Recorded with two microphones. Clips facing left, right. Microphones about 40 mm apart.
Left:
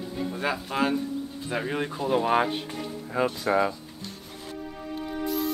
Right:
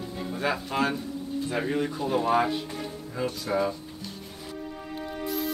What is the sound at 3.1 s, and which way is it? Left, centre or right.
Speech, left.